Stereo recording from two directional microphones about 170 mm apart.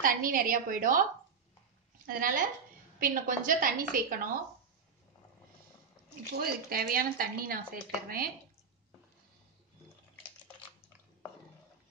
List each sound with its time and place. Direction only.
0.0 s speech: 55° right (ahead or behind)
2.0 s speech: 55° right (ahead or behind)
6.3 s speech: 60° right (ahead or behind)